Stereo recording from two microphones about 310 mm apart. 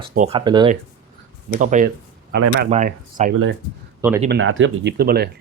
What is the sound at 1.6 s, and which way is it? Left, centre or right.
Speech, right.